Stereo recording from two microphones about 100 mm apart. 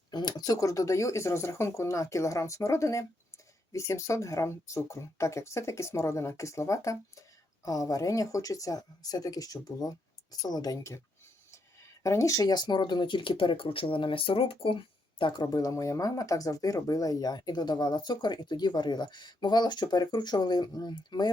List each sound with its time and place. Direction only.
0.1 s speech: 45° left (ahead or behind)
12.0 s speech: 30° left (ahead or behind); by 21.3 s 45° left (ahead or behind)